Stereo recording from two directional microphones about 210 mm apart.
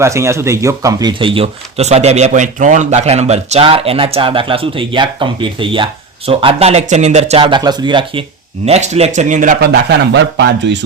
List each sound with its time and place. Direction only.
0.0 s speech: 15° right (ahead or behind); by 9.6 s 40° right (ahead or behind)
9.7 s speech: 55° right (ahead or behind)